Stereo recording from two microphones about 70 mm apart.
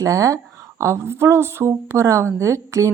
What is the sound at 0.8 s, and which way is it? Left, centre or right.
Speech, right.